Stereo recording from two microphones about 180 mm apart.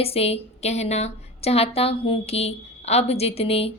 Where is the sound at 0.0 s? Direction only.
35° left (ahead or behind).